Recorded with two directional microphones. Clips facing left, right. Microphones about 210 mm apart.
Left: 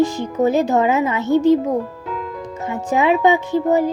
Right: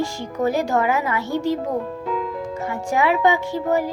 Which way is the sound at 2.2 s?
Centre (ahead or behind).